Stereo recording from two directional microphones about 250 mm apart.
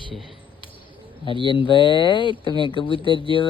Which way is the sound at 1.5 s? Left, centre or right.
Centre.